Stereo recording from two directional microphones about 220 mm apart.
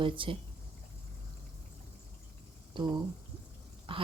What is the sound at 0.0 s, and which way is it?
Speech, 25° right (ahead or behind).